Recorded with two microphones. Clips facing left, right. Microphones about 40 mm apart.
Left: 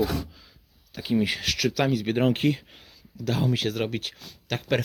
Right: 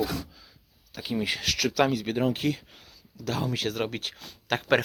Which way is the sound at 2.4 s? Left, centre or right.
Centre.